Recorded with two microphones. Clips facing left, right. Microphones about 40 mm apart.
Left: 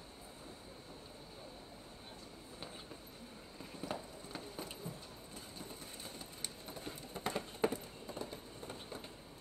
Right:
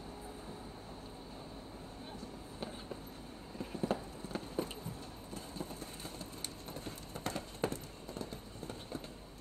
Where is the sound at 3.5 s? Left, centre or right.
Right.